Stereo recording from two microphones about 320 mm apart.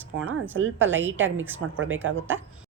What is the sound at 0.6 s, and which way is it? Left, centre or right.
Speech, right.